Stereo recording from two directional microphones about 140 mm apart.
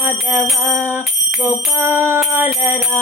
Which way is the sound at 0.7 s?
15° right (ahead or behind).